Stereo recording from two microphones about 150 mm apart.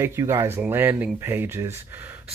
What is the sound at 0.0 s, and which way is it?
Speech, 15° right (ahead or behind).